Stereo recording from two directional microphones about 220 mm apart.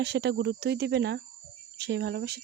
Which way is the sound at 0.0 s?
50° right (ahead or behind).